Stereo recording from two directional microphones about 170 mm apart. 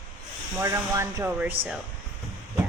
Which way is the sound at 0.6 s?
15° right (ahead or behind).